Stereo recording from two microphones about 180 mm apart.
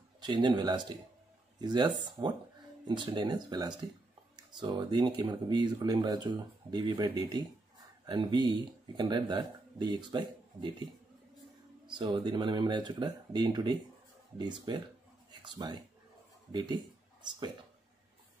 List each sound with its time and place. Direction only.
0.2 s speech: 25° right (ahead or behind)
11.8 s speech: 25° right (ahead or behind)